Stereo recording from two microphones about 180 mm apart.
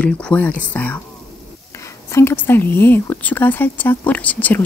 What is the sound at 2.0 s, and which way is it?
Speech, 15° left (ahead or behind).